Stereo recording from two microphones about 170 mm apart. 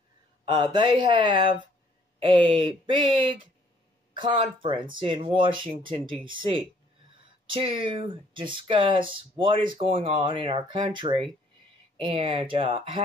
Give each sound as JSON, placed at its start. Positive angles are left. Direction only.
{"t": 0.6, "sound": "speech", "side_deg": -25}